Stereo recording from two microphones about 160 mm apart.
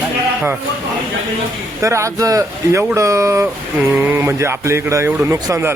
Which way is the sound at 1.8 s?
20° right (ahead or behind).